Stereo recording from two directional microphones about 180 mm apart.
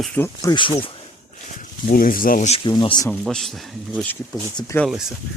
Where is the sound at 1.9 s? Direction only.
50° left (ahead or behind).